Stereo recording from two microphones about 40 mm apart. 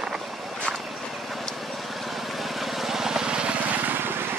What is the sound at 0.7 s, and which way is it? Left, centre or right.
Vehicle, centre.